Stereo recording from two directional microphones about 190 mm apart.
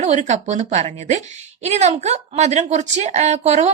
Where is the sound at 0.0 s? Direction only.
40° right (ahead or behind).